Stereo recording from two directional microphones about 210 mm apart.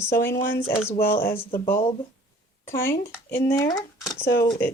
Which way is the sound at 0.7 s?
30° left (ahead or behind).